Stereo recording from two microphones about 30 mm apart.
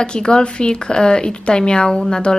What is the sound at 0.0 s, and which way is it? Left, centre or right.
A woman's voice, left.